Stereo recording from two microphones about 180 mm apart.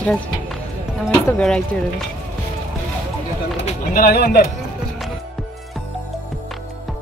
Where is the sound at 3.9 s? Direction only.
60° left (ahead or behind).